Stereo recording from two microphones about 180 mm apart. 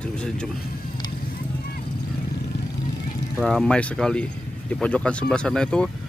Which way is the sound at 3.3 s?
5° left (ahead or behind).